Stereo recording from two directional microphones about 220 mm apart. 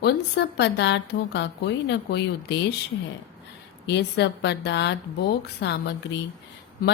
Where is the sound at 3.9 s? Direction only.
50° left (ahead or behind).